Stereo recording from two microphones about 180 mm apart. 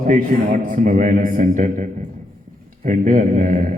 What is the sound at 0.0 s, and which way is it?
A man's voice, 45° right (ahead or behind).